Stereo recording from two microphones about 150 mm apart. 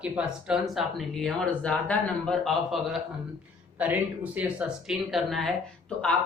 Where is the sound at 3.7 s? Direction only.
10° right (ahead or behind).